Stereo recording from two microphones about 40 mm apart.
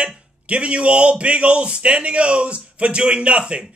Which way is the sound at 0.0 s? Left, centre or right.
Right.